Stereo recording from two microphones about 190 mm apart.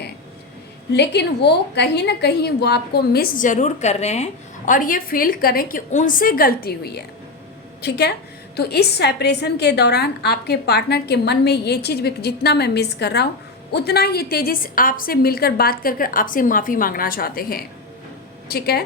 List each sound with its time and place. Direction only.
0.9 s a woman's voice: 60° left (ahead or behind)